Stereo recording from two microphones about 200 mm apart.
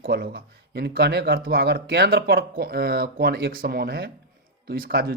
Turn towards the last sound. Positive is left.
turn(degrees=-50)  # may be behind; listen again after turning